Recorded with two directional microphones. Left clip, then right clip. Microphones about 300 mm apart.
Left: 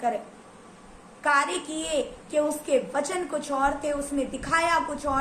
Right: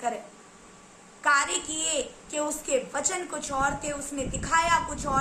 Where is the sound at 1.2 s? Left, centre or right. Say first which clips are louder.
Even; centre.